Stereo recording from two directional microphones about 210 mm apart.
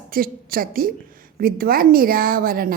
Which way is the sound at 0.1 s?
45° right (ahead or behind).